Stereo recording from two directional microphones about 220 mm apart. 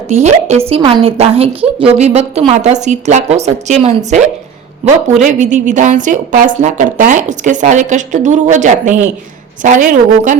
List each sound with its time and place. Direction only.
0.1 s a woman's voice: 30° right (ahead or behind)